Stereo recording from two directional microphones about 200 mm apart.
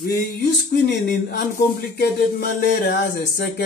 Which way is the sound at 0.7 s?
55° left (ahead or behind).